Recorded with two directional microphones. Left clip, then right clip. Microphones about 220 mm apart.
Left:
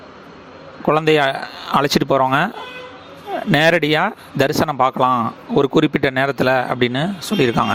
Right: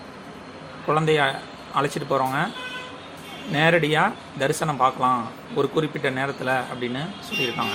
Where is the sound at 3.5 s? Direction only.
50° left (ahead or behind).